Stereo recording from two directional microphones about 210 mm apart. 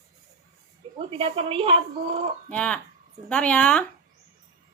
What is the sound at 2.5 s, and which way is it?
Speech, 5° left (ahead or behind).